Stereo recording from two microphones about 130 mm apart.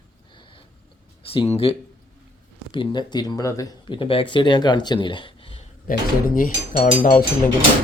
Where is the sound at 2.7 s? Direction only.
35° left (ahead or behind).